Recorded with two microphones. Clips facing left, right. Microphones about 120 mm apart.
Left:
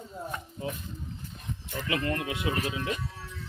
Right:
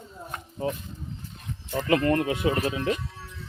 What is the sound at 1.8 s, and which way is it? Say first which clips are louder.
Speech: right 8 dB; 45° right (ahead or behind).